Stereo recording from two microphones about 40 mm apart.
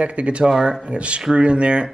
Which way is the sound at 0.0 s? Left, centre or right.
Right.